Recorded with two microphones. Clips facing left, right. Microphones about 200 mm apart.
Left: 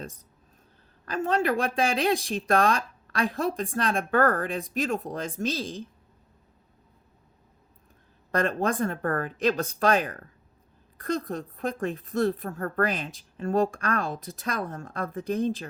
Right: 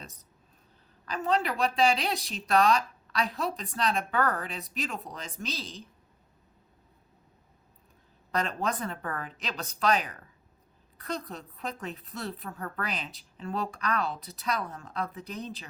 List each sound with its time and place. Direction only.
0.0 s a woman's voice: 50° left (ahead or behind)
8.3 s a woman's voice: 50° left (ahead or behind)